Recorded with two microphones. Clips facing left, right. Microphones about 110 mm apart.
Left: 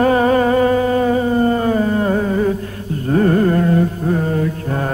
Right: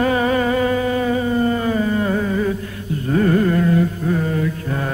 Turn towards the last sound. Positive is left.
turn(degrees=40)  # may be behind; listen again after turning